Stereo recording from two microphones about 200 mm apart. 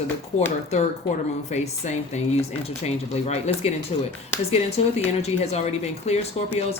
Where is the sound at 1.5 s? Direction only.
35° left (ahead or behind).